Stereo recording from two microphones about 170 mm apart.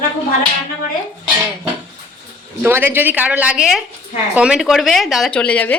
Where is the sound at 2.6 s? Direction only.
10° right (ahead or behind).